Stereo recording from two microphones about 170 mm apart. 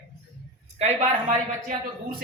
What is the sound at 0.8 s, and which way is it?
Speech, 40° right (ahead or behind).